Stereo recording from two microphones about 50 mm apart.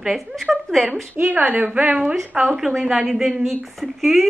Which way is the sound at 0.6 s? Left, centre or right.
Centre.